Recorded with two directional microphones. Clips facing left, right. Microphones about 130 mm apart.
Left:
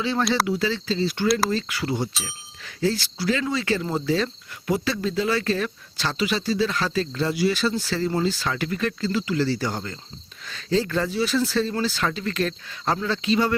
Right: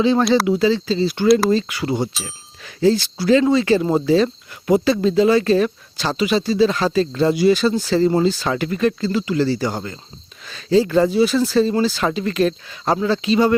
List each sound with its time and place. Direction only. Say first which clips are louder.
0.0 s speech: right 8 dB; 20° right (ahead or behind)